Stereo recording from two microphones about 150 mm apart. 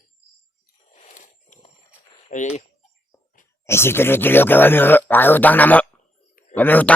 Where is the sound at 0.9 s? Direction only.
50° left (ahead or behind).